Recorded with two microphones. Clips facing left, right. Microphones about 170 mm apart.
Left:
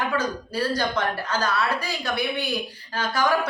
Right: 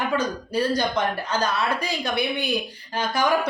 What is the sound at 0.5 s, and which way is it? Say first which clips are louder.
A woman's voice: right 3 dB; 15° right (ahead or behind).